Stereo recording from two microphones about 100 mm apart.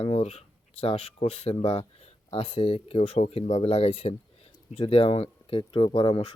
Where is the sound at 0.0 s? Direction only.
85° left.